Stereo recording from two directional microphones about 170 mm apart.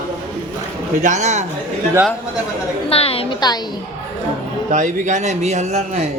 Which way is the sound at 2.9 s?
35° left (ahead or behind).